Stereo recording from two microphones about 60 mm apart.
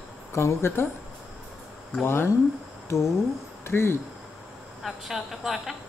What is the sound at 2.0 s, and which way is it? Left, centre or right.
Speech, left.